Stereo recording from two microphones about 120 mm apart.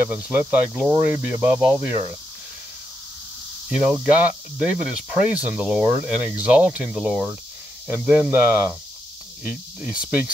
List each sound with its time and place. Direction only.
0.1 s speech: 15° right (ahead or behind)
3.6 s speech: 10° right (ahead or behind)